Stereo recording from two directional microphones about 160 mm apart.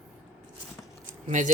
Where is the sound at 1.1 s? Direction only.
55° right (ahead or behind).